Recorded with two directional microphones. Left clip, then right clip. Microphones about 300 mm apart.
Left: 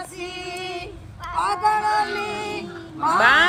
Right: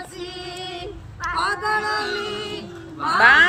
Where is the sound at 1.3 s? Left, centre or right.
Left.